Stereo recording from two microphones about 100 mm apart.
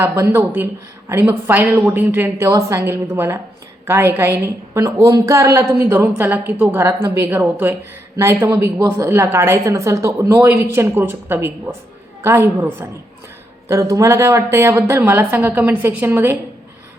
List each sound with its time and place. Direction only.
0.0 s a woman's voice: 25° right (ahead or behind)